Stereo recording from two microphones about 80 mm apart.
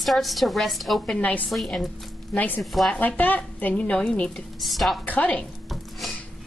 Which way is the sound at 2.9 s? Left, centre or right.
Left.